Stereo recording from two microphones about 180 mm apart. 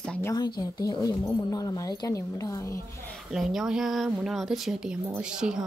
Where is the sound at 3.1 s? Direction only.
Centre (ahead or behind).